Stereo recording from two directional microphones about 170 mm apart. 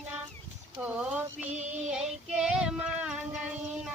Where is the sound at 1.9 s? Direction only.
5° right (ahead or behind).